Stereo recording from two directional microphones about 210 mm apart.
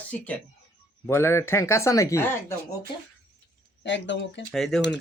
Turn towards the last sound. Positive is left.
turn(degrees=0)  # may be behind; listen again after turning